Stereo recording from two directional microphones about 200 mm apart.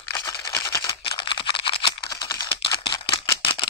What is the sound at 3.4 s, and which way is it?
Camera, 25° left (ahead or behind).